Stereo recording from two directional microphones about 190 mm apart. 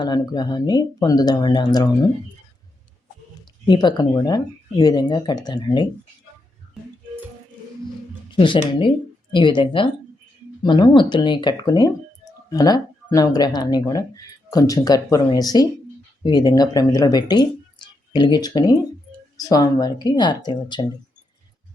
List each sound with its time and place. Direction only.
0.0 s speech: 20° left (ahead or behind)
3.7 s speech: 25° left (ahead or behind)
8.3 s speech: 25° left (ahead or behind)